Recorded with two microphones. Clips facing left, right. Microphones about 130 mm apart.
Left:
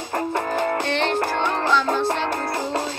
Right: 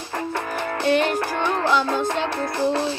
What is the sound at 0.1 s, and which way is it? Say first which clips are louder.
Music: left 3 dB; 40° left (ahead or behind).